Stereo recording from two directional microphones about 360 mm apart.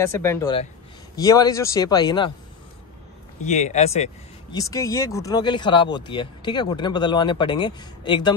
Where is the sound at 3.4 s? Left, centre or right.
Centre.